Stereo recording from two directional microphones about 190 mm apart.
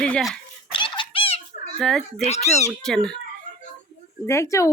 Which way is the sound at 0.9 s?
30° left (ahead or behind).